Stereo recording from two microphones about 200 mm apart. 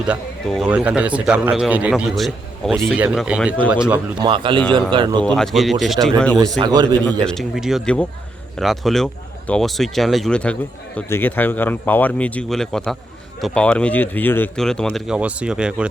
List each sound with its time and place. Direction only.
0.1 s a man's voice: 5° right (ahead or behind)
4.2 s speech: 25° right (ahead or behind)
5.2 s a man's voice: 5° left (ahead or behind)
6.6 s speech: 20° right (ahead or behind)
7.3 s a man's voice: centre (ahead or behind)